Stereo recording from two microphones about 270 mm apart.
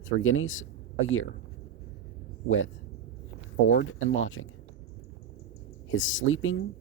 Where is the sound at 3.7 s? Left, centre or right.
Left.